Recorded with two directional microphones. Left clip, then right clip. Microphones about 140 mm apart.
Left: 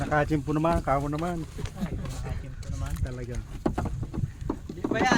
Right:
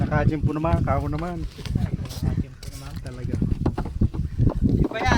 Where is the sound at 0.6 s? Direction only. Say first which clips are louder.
Even; 65° right (ahead or behind); by 1.3 s 85° right.